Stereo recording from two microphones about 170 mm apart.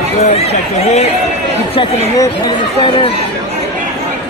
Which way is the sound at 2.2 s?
25° left (ahead or behind).